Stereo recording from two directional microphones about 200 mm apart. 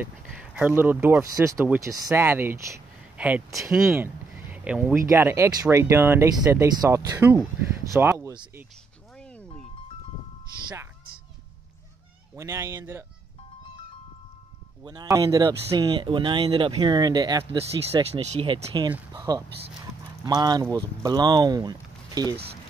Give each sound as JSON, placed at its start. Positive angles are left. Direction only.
{"t": 0.0, "sound": "speech", "side_deg": -5}
{"t": 9.1, "sound": "music", "side_deg": 5}
{"t": 12.4, "sound": "speech", "side_deg": -15}
{"t": 14.8, "sound": "speech", "side_deg": -20}
{"t": 18.1, "sound": "speech", "side_deg": -30}